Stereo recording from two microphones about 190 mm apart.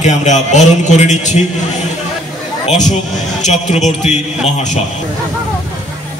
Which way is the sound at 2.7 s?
40° left (ahead or behind).